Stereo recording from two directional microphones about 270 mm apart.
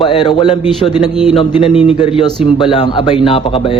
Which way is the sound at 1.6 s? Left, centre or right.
Left.